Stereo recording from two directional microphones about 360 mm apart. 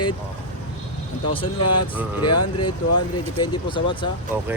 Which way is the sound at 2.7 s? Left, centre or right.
Centre.